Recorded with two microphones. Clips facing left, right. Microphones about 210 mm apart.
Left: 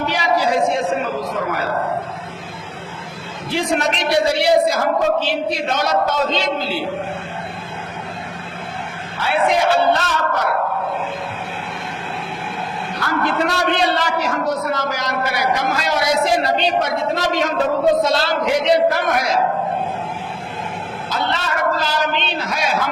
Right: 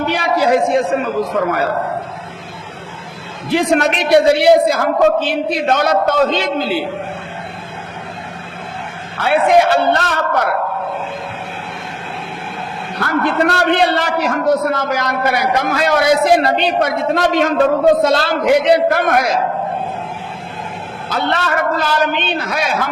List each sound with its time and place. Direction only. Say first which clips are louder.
0.1 s a man's voice: right 4 dB; 55° right (ahead or behind)
3.5 s a man's voice: right 6 dB; 60° right (ahead or behind)
9.1 s a man's voice: right 6 dB; 55° right (ahead or behind)
13.0 s a man's voice: right 4 dB; 60° right (ahead or behind)
21.1 s a man's voice: right 5 dB; 60° right (ahead or behind)